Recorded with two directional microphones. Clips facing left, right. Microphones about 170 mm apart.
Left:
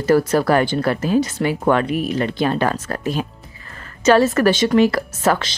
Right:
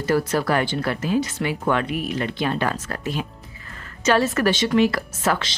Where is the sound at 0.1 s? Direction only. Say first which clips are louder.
Left 6 dB; 45° left (ahead or behind).